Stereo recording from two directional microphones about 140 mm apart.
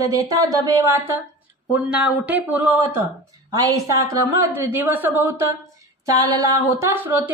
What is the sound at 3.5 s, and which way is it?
A woman's voice, 25° right (ahead or behind).